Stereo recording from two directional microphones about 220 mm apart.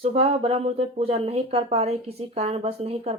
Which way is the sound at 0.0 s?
25° right (ahead or behind).